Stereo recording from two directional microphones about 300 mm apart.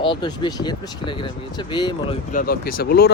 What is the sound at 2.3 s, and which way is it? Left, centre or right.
Speech, left.